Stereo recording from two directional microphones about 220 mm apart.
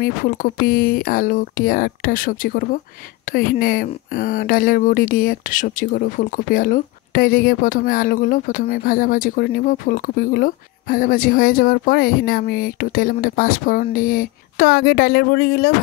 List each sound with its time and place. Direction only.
0.0 s speech: 40° left (ahead or behind)